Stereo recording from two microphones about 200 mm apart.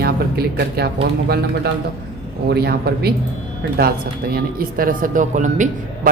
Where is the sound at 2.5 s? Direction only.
50° right (ahead or behind).